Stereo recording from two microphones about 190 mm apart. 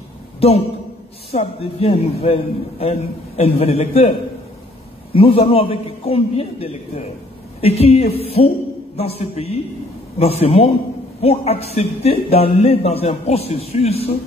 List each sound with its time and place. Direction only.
0.4 s speech: 30° left (ahead or behind)
5.1 s speech: 30° left (ahead or behind)